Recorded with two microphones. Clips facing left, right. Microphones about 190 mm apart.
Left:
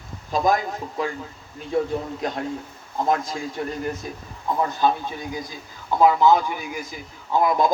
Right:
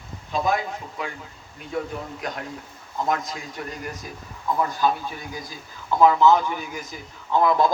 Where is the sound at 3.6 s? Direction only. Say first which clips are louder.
Left 6 dB; 30° left (ahead or behind).